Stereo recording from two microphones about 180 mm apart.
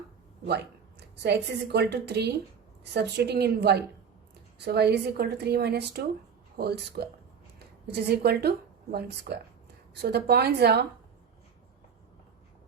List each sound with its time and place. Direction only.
0.4 s a woman's voice: 65° right (ahead or behind)